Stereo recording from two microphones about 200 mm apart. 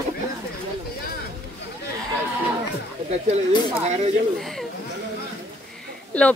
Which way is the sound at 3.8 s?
35° right (ahead or behind).